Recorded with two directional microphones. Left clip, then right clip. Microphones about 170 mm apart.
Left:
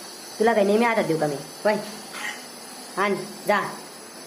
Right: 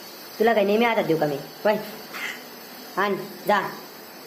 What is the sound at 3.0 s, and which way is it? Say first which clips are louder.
Speech: even; centre (ahead or behind).